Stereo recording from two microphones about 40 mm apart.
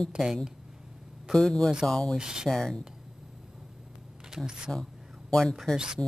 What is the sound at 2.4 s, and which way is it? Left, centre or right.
Speech, centre.